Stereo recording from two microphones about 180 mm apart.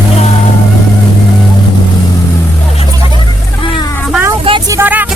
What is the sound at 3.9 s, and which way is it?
Vehicle, centre (ahead or behind).